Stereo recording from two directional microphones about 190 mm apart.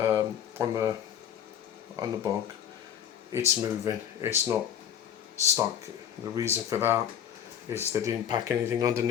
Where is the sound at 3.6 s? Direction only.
15° right (ahead or behind).